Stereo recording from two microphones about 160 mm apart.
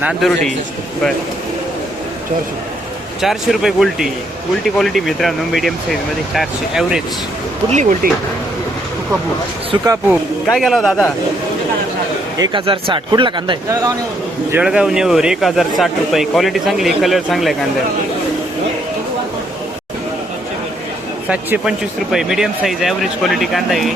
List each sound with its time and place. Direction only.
0.0 s speech: centre (ahead or behind)
3.2 s speech: centre (ahead or behind)
7.7 s speech: 50° right (ahead or behind)
9.7 s speech: 30° right (ahead or behind)
10.4 s speech: centre (ahead or behind)
12.4 s speech: 30° right (ahead or behind)
14.5 s speech: 5° right (ahead or behind)
21.2 s speech: 5° right (ahead or behind)